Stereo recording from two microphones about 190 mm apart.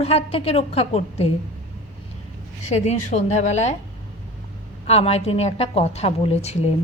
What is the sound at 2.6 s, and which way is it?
A woman's voice, 35° left (ahead or behind).